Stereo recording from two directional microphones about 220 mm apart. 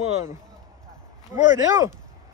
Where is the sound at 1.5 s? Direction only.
15° right (ahead or behind).